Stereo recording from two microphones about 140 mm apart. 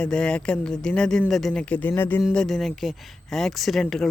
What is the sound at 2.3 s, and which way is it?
Speech, centre (ahead or behind).